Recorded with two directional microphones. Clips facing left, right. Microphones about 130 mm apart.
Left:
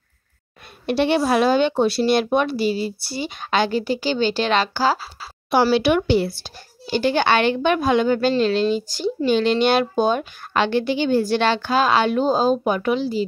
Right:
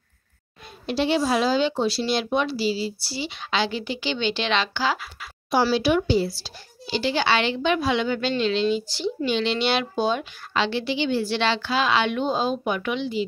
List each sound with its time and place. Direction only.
0.8 s speech: 60° left (ahead or behind); by 5.3 s 35° left (ahead or behind)
5.5 s speech: 65° left (ahead or behind); by 13.2 s 40° left (ahead or behind)